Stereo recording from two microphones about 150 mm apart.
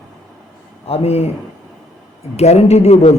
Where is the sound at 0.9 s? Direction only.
40° left (ahead or behind).